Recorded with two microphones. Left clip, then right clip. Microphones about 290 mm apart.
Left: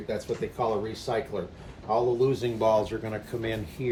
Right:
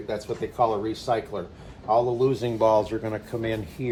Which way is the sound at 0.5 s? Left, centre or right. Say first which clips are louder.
Right 7 dB; centre.